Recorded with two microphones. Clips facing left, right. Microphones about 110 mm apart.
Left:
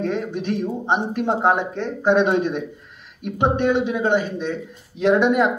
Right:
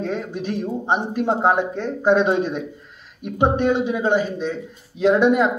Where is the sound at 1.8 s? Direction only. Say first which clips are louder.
Even; 10° right (ahead or behind).